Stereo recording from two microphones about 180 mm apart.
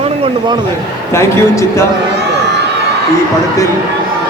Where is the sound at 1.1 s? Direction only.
15° left (ahead or behind).